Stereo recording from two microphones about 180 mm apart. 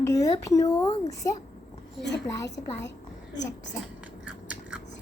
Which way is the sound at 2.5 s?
75° left (ahead or behind).